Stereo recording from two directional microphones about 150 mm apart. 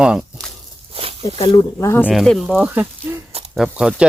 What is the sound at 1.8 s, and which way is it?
Speech, 15° left (ahead or behind).